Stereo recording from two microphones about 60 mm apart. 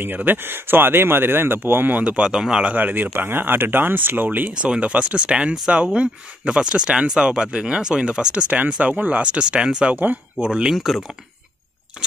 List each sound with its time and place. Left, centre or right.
0.0 s speech: right; by 2.6 s centre
2.6 s speech: right
4.6 s speech: centre
10.8 s speech: centre